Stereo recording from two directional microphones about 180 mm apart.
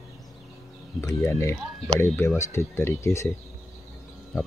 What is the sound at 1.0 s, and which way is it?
Speech, 15° left (ahead or behind).